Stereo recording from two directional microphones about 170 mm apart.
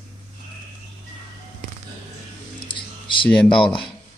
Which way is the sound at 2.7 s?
30° left (ahead or behind).